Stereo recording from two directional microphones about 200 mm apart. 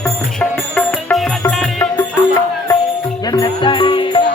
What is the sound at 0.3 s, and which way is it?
Music, 5° left (ahead or behind).